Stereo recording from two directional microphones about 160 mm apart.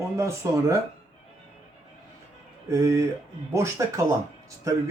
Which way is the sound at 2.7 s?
20° right (ahead or behind).